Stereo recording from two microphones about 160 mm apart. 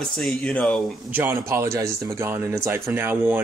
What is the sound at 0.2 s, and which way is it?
Speech, 5° left (ahead or behind).